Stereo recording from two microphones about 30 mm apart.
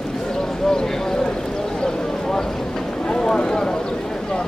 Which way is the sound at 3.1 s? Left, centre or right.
Left.